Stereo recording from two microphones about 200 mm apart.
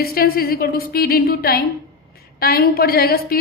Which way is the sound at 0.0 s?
50° left (ahead or behind).